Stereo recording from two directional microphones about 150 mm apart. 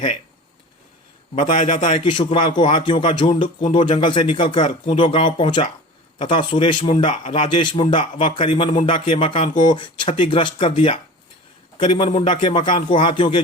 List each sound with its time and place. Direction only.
1.5 s a man's voice: 55° left (ahead or behind)
1.8 s speech: 35° left (ahead or behind)
7.1 s speech: 55° left (ahead or behind)
7.4 s speech: 35° left (ahead or behind)
12.1 s a man's voice: 55° left (ahead or behind)
12.4 s speech: 30° left (ahead or behind)